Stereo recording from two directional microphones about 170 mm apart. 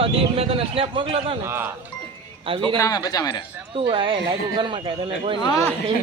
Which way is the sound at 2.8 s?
20° left (ahead or behind).